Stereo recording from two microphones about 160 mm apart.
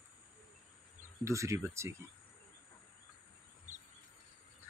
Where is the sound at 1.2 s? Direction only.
20° right (ahead or behind).